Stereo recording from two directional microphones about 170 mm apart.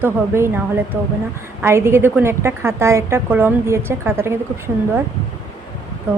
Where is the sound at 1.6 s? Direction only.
15° right (ahead or behind).